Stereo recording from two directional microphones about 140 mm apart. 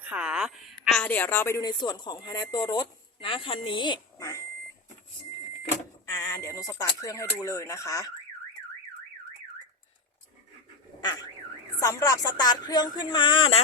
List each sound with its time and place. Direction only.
0.0 s a woman's voice: 10° right (ahead or behind)
1.0 s a woman's voice: 15° left (ahead or behind)
1.8 s speech: 30° left (ahead or behind)
6.1 s speech: 20° left (ahead or behind)
11.0 s a sound: 25° left (ahead or behind)
11.8 s speech: 20° left (ahead or behind); by 13.6 s 40° left (ahead or behind)